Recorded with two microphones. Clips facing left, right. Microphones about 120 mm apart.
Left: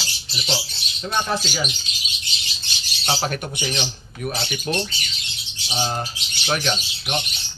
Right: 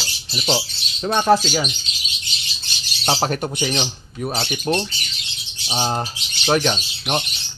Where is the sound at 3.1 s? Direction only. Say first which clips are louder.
Right 4 dB; 40° right (ahead or behind).